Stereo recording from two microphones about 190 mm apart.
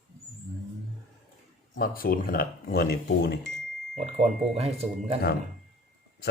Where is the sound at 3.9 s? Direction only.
35° right (ahead or behind).